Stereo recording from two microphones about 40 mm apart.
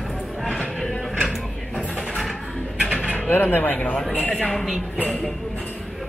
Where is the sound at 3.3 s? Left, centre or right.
Left.